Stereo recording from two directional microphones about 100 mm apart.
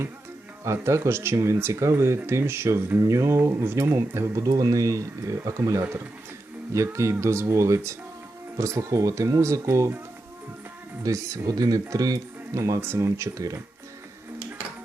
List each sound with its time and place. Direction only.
0.6 s speech: 30° right (ahead or behind)
11.0 s speech: 35° right (ahead or behind)